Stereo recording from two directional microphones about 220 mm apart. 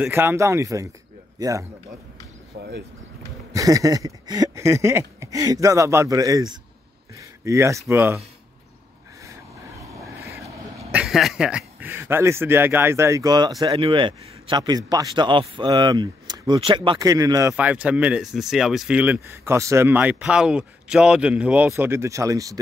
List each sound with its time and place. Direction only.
0.0 s a man's voice: 10° right (ahead or behind)
2.5 s speech: 45° right (ahead or behind)
3.5 s a man's voice: 15° right (ahead or behind)
9.2 s vehicle: 15° right (ahead or behind)
10.9 s a man's voice: 5° right (ahead or behind)